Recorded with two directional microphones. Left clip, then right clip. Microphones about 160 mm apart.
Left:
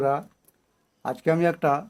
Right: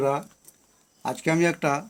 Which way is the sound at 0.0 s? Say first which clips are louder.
Left 1 dB; 20° left (ahead or behind).